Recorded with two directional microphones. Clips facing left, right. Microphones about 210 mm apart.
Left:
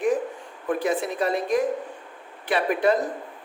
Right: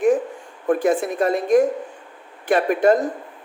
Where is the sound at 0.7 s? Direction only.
50° right (ahead or behind).